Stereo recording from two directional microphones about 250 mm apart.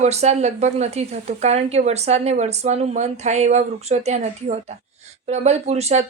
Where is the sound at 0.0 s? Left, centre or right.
Right.